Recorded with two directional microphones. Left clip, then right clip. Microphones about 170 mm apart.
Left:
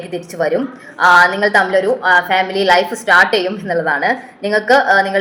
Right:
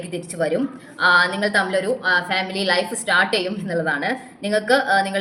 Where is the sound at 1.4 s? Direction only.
35° right (ahead or behind).